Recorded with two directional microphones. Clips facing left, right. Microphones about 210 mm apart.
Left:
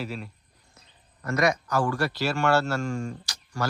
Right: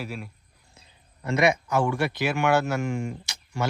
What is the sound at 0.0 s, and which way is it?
Speech, 10° right (ahead or behind).